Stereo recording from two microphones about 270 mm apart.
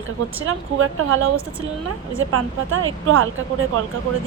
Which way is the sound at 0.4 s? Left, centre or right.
Right.